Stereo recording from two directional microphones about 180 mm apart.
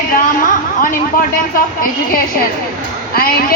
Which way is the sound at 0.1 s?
50° left (ahead or behind).